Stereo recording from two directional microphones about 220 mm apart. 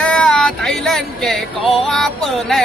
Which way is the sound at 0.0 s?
5° left (ahead or behind).